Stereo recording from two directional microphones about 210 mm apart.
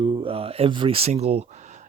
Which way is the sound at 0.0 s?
20° right (ahead or behind).